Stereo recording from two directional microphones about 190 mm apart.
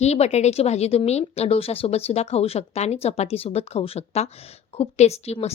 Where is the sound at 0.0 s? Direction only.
35° left (ahead or behind).